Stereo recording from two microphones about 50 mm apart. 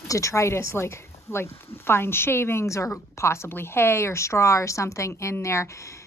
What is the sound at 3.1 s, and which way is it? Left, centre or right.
Speech, left.